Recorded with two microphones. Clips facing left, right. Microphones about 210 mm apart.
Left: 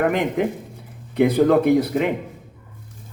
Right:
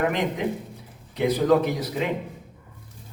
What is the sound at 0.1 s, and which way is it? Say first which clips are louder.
A man's voice: left 4 dB; 55° left (ahead or behind).